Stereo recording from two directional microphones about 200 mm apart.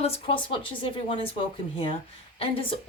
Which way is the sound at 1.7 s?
25° left (ahead or behind).